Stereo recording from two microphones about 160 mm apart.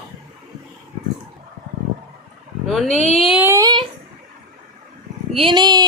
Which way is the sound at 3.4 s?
15° right (ahead or behind).